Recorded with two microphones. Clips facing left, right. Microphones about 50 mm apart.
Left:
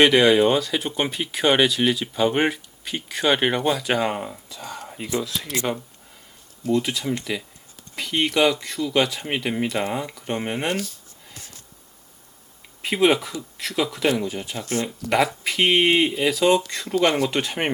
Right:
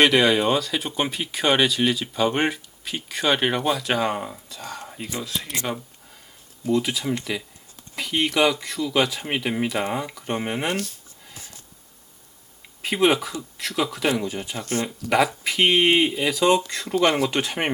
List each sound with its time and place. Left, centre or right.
0.0 s speech: centre
5.2 s speech: right
6.7 s speech: centre
12.8 s speech: centre
14.6 s speech: right
14.8 s speech: centre